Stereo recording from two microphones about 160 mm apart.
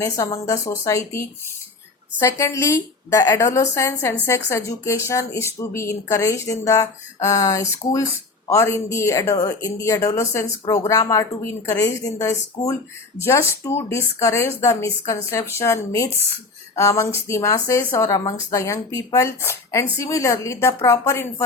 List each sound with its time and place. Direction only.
0.0 s a woman's voice: 20° left (ahead or behind)
2.2 s a woman's voice: 15° left (ahead or behind)